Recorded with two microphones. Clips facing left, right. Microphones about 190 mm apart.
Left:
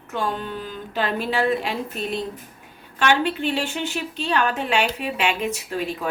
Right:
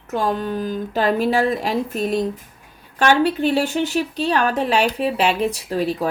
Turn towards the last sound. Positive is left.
turn(degrees=-35)  # may be behind; listen again after turning